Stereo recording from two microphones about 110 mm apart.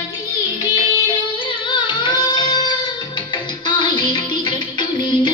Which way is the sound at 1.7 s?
45° left (ahead or behind).